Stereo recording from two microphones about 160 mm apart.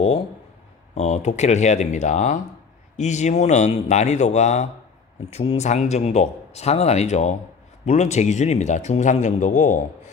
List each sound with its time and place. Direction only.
0.9 s a man's voice: 45° left (ahead or behind)